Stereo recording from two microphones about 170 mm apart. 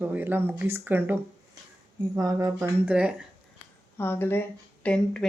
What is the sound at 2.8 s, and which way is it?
Speech, 5° right (ahead or behind).